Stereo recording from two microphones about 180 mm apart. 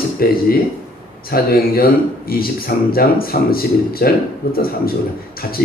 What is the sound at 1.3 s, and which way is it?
Music, 55° left (ahead or behind).